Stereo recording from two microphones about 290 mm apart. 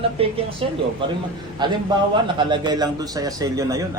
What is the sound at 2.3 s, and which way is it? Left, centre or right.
Speech, centre.